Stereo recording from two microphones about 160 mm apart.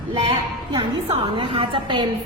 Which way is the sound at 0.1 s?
30° right (ahead or behind).